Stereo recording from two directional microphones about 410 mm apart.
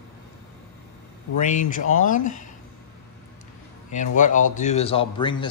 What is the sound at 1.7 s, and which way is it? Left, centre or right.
Speech, centre.